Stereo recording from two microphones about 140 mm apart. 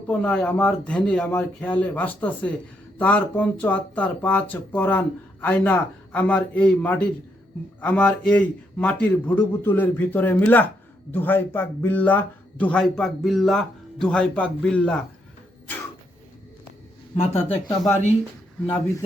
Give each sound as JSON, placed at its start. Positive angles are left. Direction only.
{"t": 0.1, "sound": "speech", "side_deg": 5}
{"t": 17.2, "sound": "speech", "side_deg": 45}